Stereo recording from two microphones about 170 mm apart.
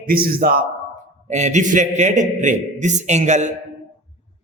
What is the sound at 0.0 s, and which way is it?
Speech, 60° right (ahead or behind).